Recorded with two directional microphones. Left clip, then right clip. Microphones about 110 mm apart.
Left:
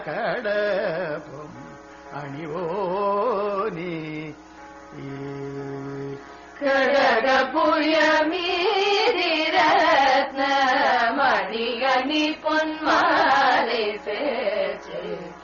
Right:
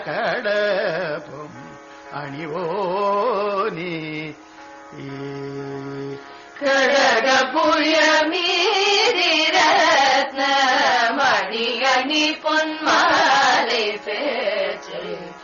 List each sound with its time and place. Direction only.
0.0 s carnatic music: 30° left (ahead or behind)
3.3 s music: 30° left (ahead or behind)
3.9 s mantra: 50° left (ahead or behind)
6.6 s music: 30° left (ahead or behind)
7.2 s chant: 30° left (ahead or behind)
7.6 s music: 30° left (ahead or behind)
9.8 s carnatic music: 35° left (ahead or behind)
14.0 s music: 30° left (ahead or behind)